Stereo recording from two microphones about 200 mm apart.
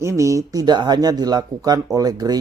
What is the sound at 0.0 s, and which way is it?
Speech, 15° right (ahead or behind).